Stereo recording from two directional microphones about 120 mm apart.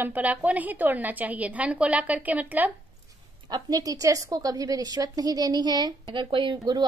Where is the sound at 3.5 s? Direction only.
30° right (ahead or behind).